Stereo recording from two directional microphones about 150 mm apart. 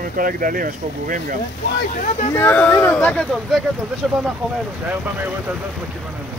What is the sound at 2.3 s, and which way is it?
Speech, 15° left (ahead or behind).